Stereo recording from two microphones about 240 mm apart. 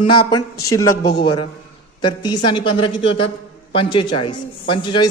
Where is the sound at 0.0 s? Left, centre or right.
Centre.